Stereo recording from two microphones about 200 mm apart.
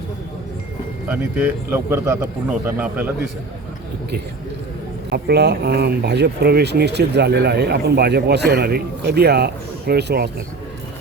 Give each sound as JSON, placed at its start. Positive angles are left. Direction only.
{"t": 1.1, "sound": "speech", "side_deg": -5}
{"t": 5.1, "sound": "speech", "side_deg": -55}